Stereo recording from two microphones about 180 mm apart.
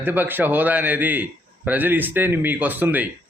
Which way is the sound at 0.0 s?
10° right (ahead or behind).